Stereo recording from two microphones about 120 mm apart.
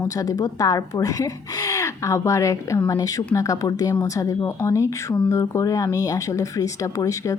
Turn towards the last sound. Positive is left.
turn(degrees=25)  # may be behind; listen again after turning